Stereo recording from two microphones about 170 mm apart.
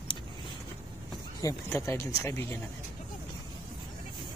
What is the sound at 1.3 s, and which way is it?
Speech, 20° left (ahead or behind).